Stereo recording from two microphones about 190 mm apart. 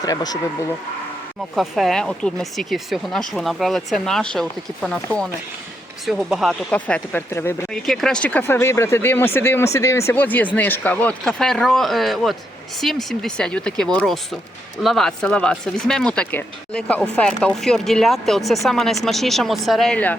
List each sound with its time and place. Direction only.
0.0 s speech: 20° left (ahead or behind)
1.5 s speech: centre (ahead or behind)